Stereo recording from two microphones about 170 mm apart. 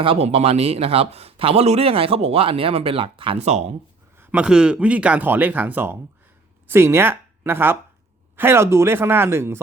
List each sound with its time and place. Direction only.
0.0 s speech: 35° right (ahead or behind)
4.2 s speech: 10° right (ahead or behind)